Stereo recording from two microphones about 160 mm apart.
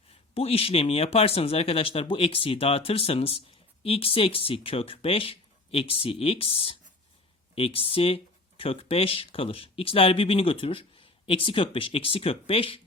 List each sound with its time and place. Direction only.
0.1 s speech: 35° left (ahead or behind)